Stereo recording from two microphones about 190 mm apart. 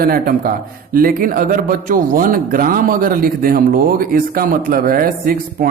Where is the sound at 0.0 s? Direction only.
50° right (ahead or behind).